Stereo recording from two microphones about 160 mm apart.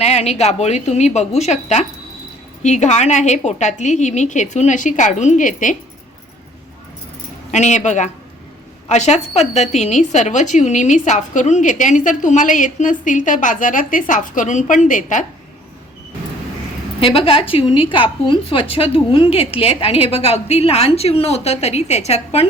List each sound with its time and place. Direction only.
0.0 s a woman's voice: 40° left (ahead or behind)
7.5 s a woman's voice: 45° left (ahead or behind)
17.0 s a woman's voice: 35° left (ahead or behind)